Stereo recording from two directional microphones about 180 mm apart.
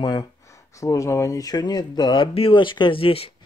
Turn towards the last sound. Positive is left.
turn(degrees=30)  # may be behind; listen again after turning